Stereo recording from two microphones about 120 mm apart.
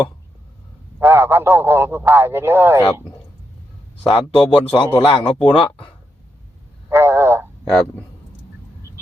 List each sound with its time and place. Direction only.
0.9 s a man's voice: 20° right (ahead or behind)
4.0 s a man's voice: 50° left (ahead or behind)
6.9 s a sound: 20° right (ahead or behind)